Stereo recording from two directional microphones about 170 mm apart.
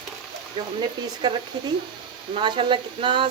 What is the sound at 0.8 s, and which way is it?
Speech, 25° right (ahead or behind).